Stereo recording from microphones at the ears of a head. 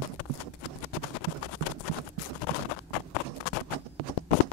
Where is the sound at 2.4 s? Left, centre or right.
Left.